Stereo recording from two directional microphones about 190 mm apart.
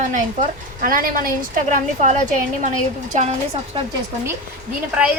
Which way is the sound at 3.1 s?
35° right (ahead or behind).